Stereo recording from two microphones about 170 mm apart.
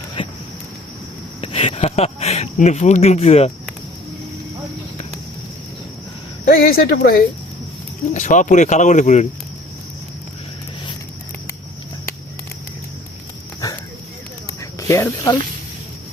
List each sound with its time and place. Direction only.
0.2 s a sound: 35° left (ahead or behind)
1.4 s speech: 35° left (ahead or behind)
6.4 s speech: 60° left (ahead or behind)
8.1 s speech: 45° left (ahead or behind)
14.6 s snake: 20° left (ahead or behind)